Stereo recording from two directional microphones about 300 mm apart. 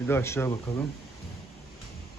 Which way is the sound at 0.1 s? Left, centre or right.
Centre.